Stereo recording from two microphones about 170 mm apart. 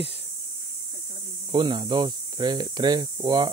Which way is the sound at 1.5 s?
30° right (ahead or behind).